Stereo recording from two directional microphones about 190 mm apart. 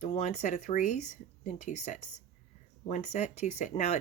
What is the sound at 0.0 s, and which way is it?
A woman's voice, 35° left (ahead or behind).